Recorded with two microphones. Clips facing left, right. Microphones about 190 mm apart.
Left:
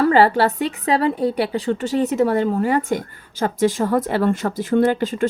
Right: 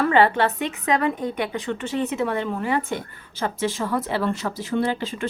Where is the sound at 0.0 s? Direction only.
35° left (ahead or behind).